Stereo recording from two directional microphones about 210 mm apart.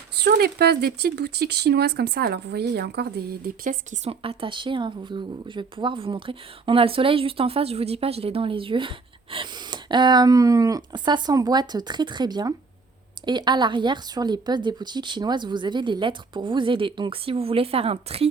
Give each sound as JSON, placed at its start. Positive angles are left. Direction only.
{"t": 0.2, "sound": "speech", "side_deg": -50}